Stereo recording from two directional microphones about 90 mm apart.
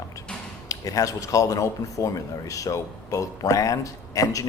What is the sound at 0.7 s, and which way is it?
Speech, 40° left (ahead or behind).